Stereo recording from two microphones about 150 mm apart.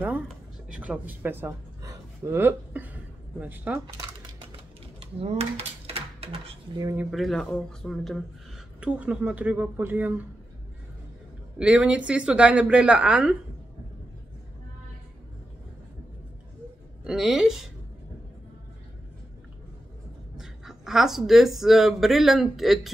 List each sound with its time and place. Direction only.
0.7 s a man's voice: 10° right (ahead or behind)
5.0 s a sound: 40° right (ahead or behind)
7.1 s speech: centre (ahead or behind)
8.8 s a woman's voice: 10° right (ahead or behind)
11.5 s a woman's voice: 5° right (ahead or behind)
17.0 s speech: 5° right (ahead or behind)
20.3 s speech: centre (ahead or behind)